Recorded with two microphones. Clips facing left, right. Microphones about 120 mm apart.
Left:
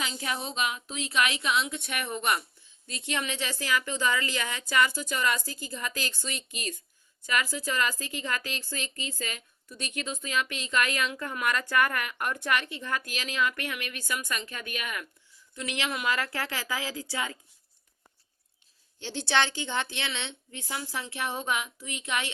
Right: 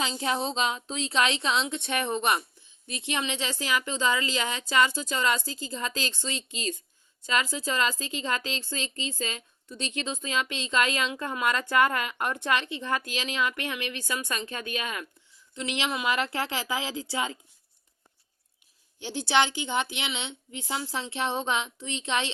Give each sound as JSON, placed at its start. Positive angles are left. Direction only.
{"t": 0.0, "sound": "a woman's voice", "side_deg": -30}
{"t": 18.9, "sound": "a woman's voice", "side_deg": -15}